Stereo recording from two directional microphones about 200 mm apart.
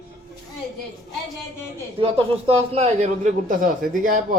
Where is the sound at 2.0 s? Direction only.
30° right (ahead or behind).